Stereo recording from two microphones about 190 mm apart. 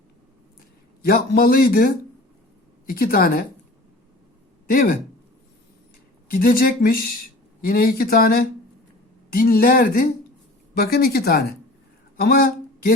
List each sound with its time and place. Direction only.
1.0 s speech: 55° left (ahead or behind)
2.9 s speech: 50° left (ahead or behind)
4.7 s speech: 50° left (ahead or behind)
6.3 s speech: 50° left (ahead or behind)
12.1 s a sound: 50° left (ahead or behind)